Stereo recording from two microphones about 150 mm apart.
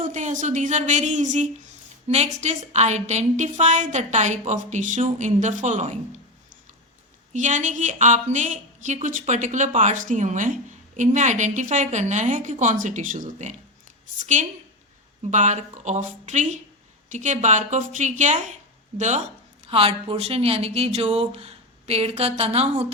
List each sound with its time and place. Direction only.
0.0 s a woman's voice: 55° right (ahead or behind)
7.3 s a woman's voice: 55° right (ahead or behind)